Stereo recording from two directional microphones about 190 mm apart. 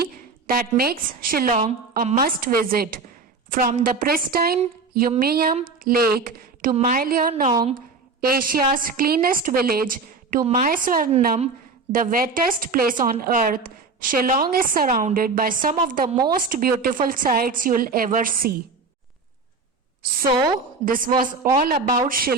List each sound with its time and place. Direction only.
0.0 s a woman's voice: 50° right (ahead or behind)
20.3 s a woman's voice: 25° right (ahead or behind)
20.8 s a woman's voice: 45° right (ahead or behind)